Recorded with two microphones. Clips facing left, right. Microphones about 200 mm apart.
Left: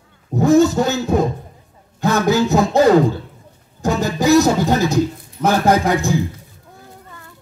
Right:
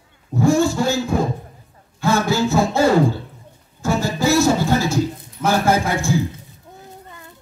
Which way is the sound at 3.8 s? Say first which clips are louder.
Left 2 dB; 20° left (ahead or behind).